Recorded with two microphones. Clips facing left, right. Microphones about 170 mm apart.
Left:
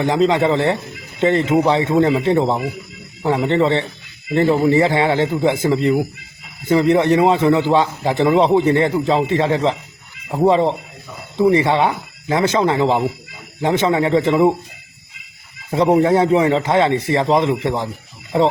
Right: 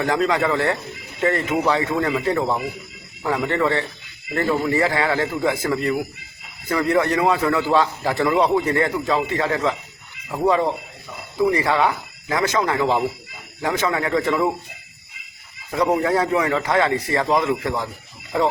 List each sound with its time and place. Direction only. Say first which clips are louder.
0.0 s a man's voice: left 5 dB; 20° left (ahead or behind)
15.7 s a man's voice: left 5 dB; 25° left (ahead or behind)